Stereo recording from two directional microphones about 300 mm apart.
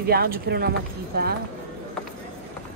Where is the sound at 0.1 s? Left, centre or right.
Right.